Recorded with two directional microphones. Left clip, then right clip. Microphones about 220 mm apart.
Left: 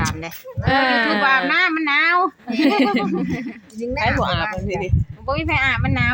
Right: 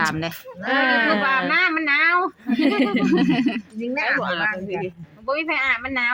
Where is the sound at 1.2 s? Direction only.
45° left (ahead or behind).